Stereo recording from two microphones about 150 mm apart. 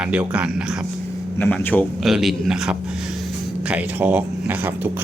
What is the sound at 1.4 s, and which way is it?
Speech, 10° left (ahead or behind).